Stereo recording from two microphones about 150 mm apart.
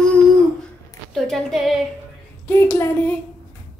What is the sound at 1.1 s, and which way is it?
Speech, centre (ahead or behind).